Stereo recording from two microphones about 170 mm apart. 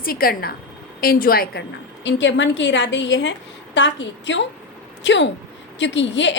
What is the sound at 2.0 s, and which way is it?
A woman's voice, 90° left.